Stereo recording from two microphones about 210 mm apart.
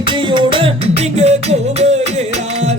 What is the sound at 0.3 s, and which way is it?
Music, 25° right (ahead or behind).